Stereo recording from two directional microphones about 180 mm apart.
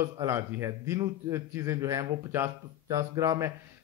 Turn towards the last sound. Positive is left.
turn(degrees=-15)  # may be behind; listen again after turning